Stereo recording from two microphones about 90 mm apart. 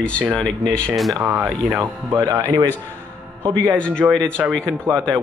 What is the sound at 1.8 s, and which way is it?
Speech, 40° right (ahead or behind).